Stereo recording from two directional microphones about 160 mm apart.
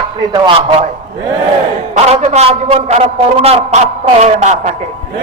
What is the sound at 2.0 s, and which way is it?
A man's voice, 40° right (ahead or behind).